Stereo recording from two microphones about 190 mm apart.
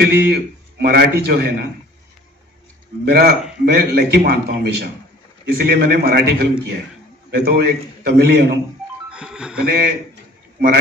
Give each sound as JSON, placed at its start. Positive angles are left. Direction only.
{"t": 0.0, "sound": "a man's voice", "side_deg": -60}
{"t": 3.1, "sound": "a man's voice", "side_deg": -55}
{"t": 9.1, "sound": "speech", "side_deg": -5}
{"t": 9.7, "sound": "a man's voice", "side_deg": -55}